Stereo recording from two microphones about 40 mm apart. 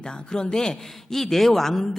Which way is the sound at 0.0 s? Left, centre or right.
Centre.